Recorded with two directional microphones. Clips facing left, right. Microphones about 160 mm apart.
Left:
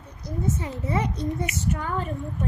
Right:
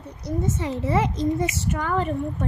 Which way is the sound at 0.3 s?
90° right.